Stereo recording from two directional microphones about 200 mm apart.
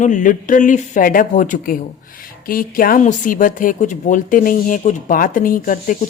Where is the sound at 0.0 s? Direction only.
40° left (ahead or behind).